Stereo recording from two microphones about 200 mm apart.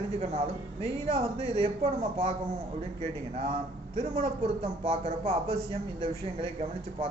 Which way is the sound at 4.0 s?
30° right (ahead or behind).